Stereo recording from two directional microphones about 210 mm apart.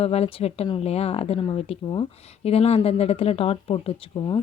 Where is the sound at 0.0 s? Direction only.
30° left (ahead or behind).